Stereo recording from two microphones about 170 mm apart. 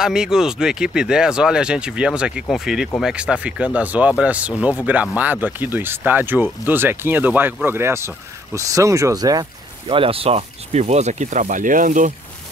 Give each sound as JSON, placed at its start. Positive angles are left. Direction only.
{"t": 0.0, "sound": "speech", "side_deg": -5}